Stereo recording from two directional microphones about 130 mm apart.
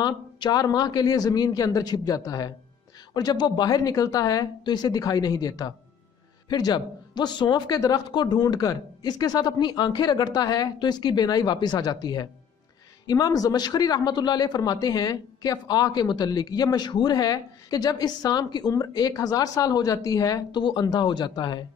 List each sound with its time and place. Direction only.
0.0 s a man's voice: 35° left (ahead or behind)